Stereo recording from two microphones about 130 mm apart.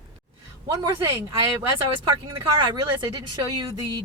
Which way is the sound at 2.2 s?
30° right (ahead or behind).